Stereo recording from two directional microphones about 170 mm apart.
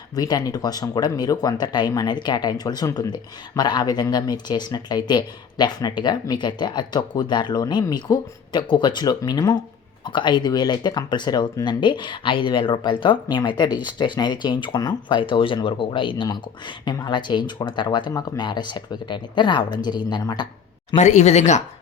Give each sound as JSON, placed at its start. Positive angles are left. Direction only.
{"t": 0.2, "sound": "speech", "side_deg": 20}
{"t": 20.9, "sound": "speech", "side_deg": 40}